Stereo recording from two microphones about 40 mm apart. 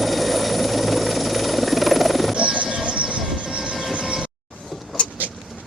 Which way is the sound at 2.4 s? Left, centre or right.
Right.